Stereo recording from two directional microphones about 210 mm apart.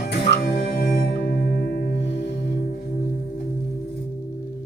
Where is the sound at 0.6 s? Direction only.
55° left (ahead or behind).